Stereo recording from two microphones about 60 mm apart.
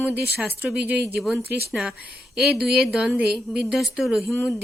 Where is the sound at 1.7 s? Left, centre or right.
Centre.